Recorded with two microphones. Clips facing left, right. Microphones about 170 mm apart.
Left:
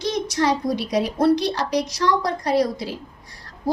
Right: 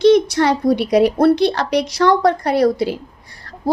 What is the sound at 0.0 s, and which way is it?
A woman's voice, 65° right (ahead or behind).